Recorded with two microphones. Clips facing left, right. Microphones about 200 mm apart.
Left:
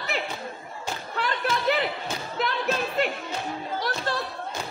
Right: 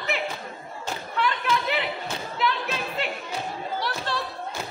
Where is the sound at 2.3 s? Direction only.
45° left (ahead or behind).